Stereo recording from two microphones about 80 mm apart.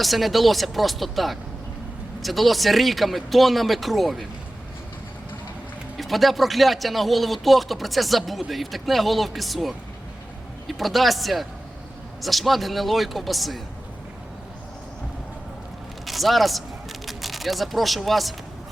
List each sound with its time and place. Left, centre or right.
0.0 s speech: centre
6.0 s speech: centre
16.0 s a man's voice: centre